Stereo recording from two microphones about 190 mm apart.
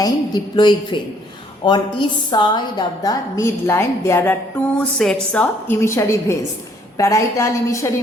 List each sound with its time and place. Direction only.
0.0 s a woman's voice: 20° left (ahead or behind)